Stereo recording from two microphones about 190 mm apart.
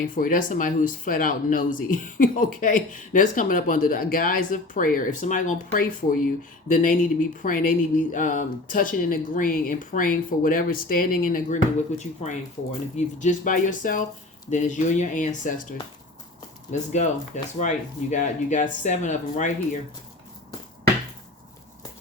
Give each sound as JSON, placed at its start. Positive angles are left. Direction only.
{"t": 0.1, "sound": "speech", "side_deg": 45}
{"t": 16.9, "sound": "speech", "side_deg": 40}